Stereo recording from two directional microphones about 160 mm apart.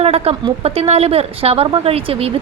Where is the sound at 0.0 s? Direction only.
40° right (ahead or behind).